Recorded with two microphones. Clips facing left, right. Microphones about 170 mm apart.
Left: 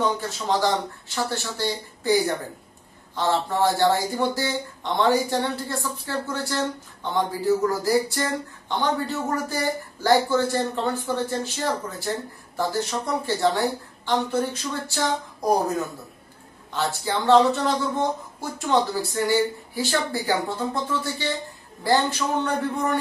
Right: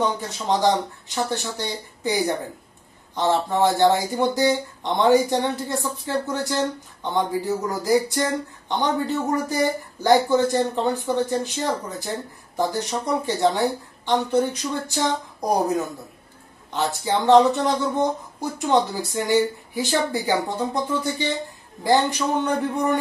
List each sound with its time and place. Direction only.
0.2 s speech: 20° right (ahead or behind)
16.7 s speech: 20° right (ahead or behind)